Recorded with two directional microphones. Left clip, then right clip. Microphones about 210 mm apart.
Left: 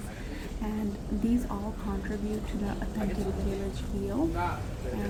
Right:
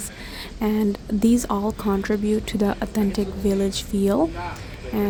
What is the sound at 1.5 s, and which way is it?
Speech, 45° right (ahead or behind).